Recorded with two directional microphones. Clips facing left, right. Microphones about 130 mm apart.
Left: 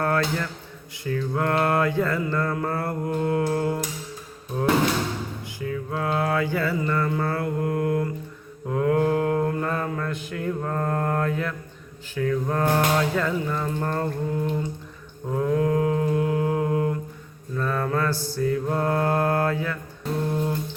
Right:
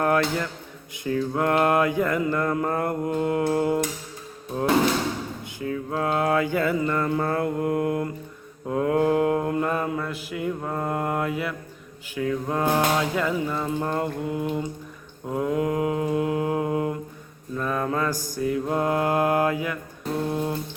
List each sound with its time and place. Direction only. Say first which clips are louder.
0.0 s speech: right 2 dB; 20° right (ahead or behind)
1.0 s mantra: right 2 dB; 20° right (ahead or behind)
5.5 s mantra: right 1 dB; 25° right (ahead or behind)